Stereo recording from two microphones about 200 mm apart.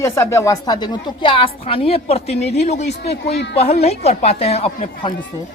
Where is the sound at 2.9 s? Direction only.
55° left (ahead or behind).